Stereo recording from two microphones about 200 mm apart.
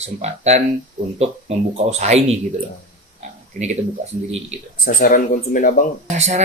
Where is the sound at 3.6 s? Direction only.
40° right (ahead or behind).